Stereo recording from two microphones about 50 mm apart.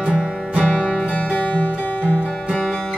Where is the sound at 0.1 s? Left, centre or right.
Centre.